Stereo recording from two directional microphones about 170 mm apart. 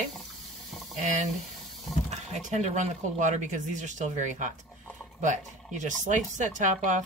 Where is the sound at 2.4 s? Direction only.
45° right (ahead or behind).